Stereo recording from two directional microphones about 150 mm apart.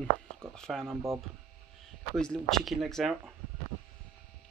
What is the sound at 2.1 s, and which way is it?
Speech, 5° left (ahead or behind).